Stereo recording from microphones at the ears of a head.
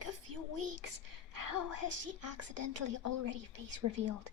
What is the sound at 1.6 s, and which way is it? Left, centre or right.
A woman's voice, left.